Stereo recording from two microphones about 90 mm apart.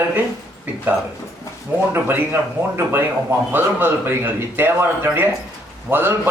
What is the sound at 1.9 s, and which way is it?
Speech, 25° right (ahead or behind).